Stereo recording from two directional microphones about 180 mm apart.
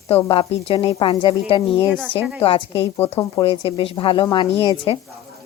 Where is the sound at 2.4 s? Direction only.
30° left (ahead or behind).